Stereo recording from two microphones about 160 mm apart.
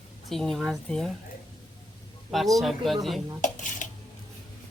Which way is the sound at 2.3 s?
Centre (ahead or behind).